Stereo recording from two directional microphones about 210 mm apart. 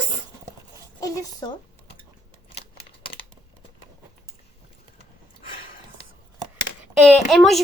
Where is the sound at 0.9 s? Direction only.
20° left (ahead or behind).